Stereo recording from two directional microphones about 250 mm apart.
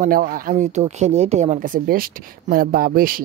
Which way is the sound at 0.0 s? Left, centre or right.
Right.